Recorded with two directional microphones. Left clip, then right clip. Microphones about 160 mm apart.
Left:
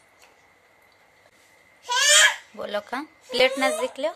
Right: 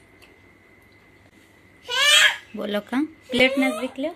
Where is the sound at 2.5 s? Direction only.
10° left (ahead or behind).